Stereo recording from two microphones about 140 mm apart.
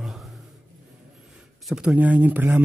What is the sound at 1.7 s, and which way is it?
Speech, 5° right (ahead or behind).